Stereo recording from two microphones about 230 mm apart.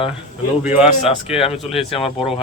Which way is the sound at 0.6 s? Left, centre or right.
Centre.